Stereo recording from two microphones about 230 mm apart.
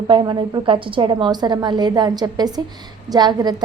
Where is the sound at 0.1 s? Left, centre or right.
Centre.